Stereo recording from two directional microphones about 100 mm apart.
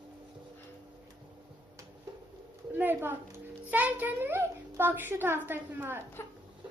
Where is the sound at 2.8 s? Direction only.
20° right (ahead or behind).